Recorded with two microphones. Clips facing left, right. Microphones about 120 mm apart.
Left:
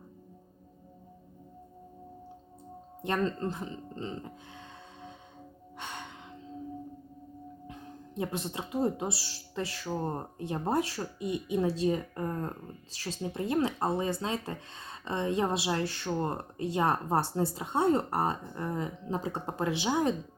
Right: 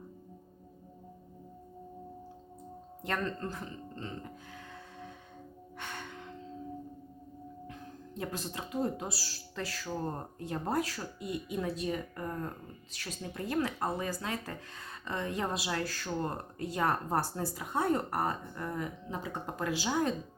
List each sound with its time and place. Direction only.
3.0 s speech: 20° left (ahead or behind)
5.7 s music: 20° left (ahead or behind)
7.7 s speech: 20° left (ahead or behind)